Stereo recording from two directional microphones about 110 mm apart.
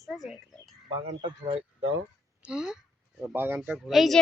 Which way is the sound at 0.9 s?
50° right (ahead or behind).